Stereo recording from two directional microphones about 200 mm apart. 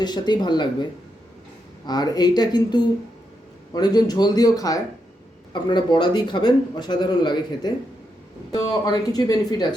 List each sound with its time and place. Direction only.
0.0 s a man's voice: 20° left (ahead or behind)
1.9 s a man's voice: 20° left (ahead or behind)